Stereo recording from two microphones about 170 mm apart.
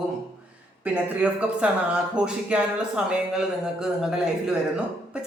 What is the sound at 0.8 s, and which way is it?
A man's voice, 10° right (ahead or behind).